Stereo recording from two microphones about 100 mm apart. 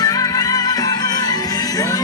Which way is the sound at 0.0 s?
35° left (ahead or behind).